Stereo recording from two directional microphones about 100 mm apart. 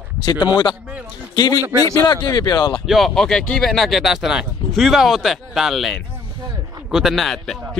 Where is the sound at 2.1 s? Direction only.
45° left (ahead or behind).